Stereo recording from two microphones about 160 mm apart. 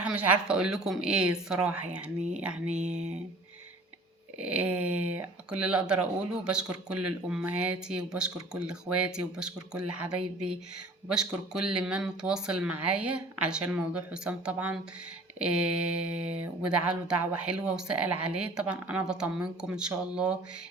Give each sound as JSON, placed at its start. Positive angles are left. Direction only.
{"t": 0.0, "sound": "speech", "side_deg": -10}
{"t": 2.6, "sound": "speech", "side_deg": -45}
{"t": 4.4, "sound": "speech", "side_deg": -10}